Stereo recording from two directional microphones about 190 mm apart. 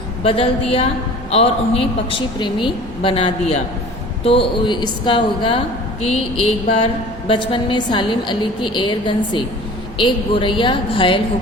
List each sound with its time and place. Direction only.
0.2 s a woman's voice: 30° left (ahead or behind)